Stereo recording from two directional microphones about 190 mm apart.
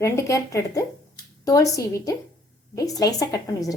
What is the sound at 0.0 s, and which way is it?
A woman's voice, 15° left (ahead or behind).